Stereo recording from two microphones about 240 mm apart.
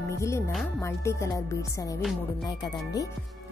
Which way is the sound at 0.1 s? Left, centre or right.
Centre.